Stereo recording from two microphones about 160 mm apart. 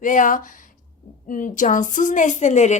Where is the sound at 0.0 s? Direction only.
55° left (ahead or behind).